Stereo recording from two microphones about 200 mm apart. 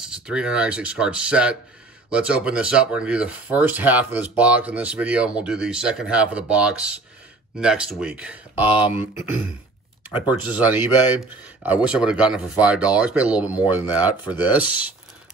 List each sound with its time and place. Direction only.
0.0 s speech: 5° right (ahead or behind)
8.6 s speech: 25° left (ahead or behind)
10.3 s speech: 10° right (ahead or behind)